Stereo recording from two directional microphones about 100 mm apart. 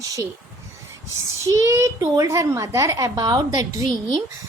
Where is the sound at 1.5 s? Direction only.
30° right (ahead or behind).